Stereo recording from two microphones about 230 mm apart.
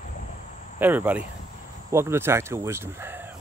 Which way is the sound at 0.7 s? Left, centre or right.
Centre.